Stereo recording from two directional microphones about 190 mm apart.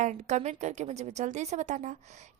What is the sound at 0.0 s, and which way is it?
A woman's voice, 40° right (ahead or behind).